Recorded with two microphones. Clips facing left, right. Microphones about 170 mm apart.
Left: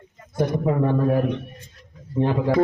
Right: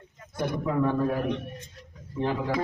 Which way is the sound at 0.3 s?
45° left (ahead or behind).